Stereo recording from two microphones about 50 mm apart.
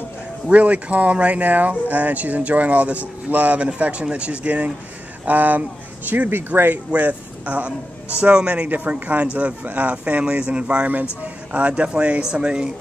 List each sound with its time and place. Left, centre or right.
0.5 s speech: right
5.2 s speech: right
6.9 s speech: right
8.6 s speech: right
10.4 s speech: right
12.2 s speech: centre